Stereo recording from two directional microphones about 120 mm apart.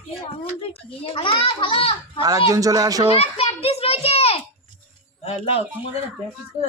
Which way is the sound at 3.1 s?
60° left (ahead or behind).